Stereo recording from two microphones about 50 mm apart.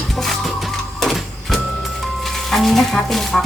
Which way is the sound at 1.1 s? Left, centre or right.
Centre.